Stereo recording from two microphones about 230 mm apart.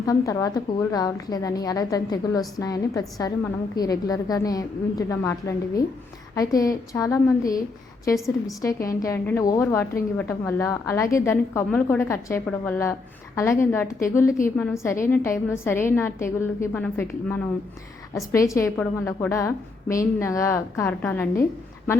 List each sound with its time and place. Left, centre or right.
0.0 s a woman's voice: centre